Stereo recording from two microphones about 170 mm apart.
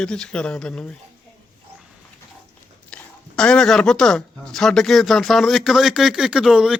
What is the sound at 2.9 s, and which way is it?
Speech, 5° left (ahead or behind).